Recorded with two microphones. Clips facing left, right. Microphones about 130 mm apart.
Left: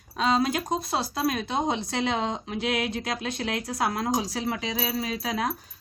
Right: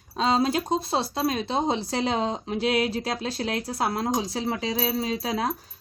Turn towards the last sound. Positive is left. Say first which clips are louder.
# right 2 dB
turn(degrees=-30)  # may be behind; listen again after turning